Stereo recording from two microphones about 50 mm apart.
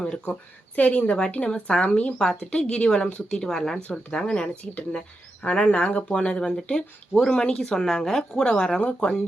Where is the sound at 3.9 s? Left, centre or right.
Left.